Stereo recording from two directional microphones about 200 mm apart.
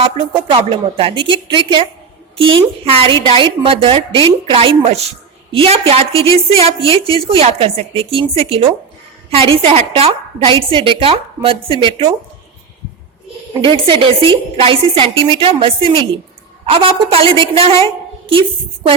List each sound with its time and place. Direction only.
0.0 s a woman's voice: 25° right (ahead or behind)
13.8 s a woman's voice: 25° right (ahead or behind)